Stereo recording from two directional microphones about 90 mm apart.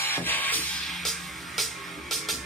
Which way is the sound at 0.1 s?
20° left (ahead or behind).